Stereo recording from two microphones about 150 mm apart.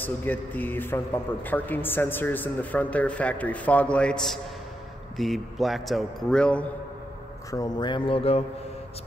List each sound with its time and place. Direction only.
0.0 s a man's voice: 10° left (ahead or behind)
7.5 s speech: 25° left (ahead or behind)